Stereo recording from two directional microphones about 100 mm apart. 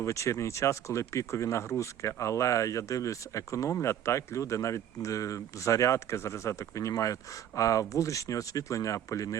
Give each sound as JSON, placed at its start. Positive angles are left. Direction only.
{"t": 0.0, "sound": "speech", "side_deg": 30}